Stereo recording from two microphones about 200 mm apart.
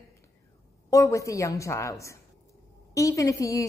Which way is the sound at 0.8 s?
15° left (ahead or behind).